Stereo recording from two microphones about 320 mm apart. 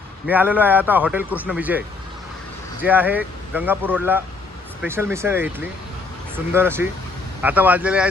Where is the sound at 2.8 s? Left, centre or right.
Centre.